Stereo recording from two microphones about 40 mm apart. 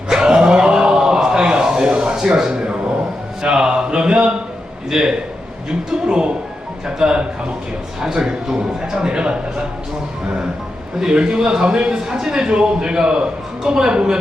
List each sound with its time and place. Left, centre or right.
0.1 s a sound: centre
5.9 s a man's voice: centre
11.0 s a man's voice: right